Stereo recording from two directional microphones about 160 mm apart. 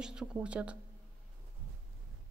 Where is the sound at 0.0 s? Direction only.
5° right (ahead or behind).